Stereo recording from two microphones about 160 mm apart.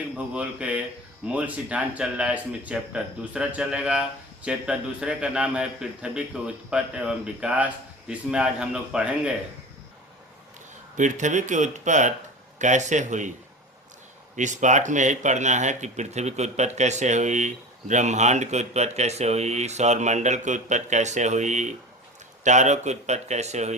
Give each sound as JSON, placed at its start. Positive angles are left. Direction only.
{"t": 0.3, "sound": "a man's voice", "side_deg": -5}
{"t": 10.9, "sound": "speech", "side_deg": -50}
{"t": 14.3, "sound": "speech", "side_deg": -50}